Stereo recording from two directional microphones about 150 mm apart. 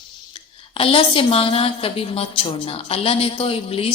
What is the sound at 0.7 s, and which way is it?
A woman's voice, 40° left (ahead or behind).